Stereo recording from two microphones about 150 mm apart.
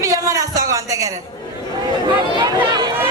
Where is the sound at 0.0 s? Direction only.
25° right (ahead or behind).